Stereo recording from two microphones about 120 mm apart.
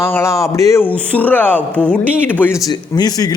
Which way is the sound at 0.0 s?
20° left (ahead or behind).